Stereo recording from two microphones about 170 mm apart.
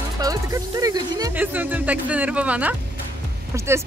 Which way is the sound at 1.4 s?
10° right (ahead or behind).